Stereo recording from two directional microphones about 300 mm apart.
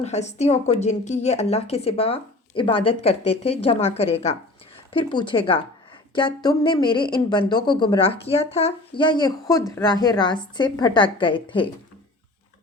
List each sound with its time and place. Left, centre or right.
0.0 s a woman's voice: left